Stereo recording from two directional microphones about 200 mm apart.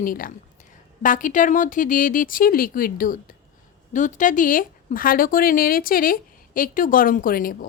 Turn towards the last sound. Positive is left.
turn(degrees=45)  # may be behind; listen again after turning